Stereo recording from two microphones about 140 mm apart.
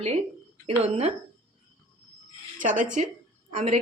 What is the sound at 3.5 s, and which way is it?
Speech, 55° right (ahead or behind).